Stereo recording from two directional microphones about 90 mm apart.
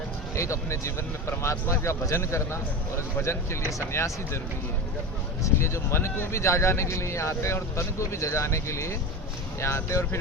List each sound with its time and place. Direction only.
0.3 s speech: 35° left (ahead or behind)
5.4 s speech: 30° left (ahead or behind)